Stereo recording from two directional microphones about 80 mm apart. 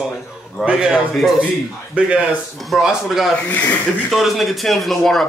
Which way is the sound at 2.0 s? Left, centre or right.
Centre.